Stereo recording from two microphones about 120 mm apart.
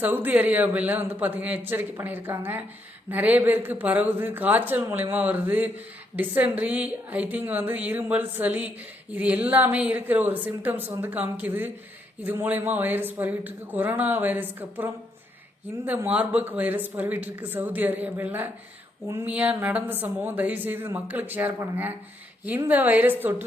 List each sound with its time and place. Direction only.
0.0 s speech: 15° right (ahead or behind)
19.0 s a sound: 20° right (ahead or behind)
19.3 s speech: 15° right (ahead or behind)